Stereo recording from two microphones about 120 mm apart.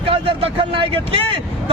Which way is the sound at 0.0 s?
50° right (ahead or behind).